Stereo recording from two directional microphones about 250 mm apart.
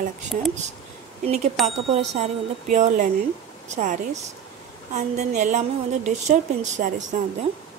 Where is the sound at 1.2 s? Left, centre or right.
Right.